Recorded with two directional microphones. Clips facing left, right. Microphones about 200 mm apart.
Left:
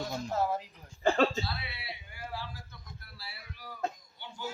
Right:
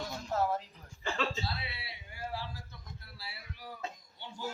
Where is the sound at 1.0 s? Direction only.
50° left (ahead or behind).